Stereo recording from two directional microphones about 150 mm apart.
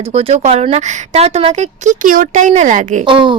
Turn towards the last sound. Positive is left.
turn(degrees=-30)  # may be behind; listen again after turning